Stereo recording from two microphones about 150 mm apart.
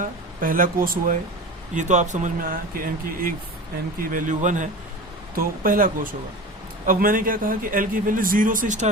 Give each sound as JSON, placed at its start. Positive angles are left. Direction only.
{"t": 0.0, "sound": "speech", "side_deg": -65}
{"t": 1.7, "sound": "speech", "side_deg": -55}
{"t": 5.3, "sound": "a man's voice", "side_deg": -75}